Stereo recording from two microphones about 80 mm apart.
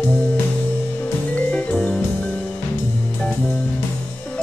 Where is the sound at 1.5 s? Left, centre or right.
Centre.